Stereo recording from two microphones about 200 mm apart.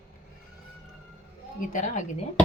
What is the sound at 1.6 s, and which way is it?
Speech, 40° left (ahead or behind).